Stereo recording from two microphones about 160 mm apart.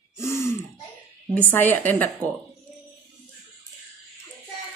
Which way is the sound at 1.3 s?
10° left (ahead or behind).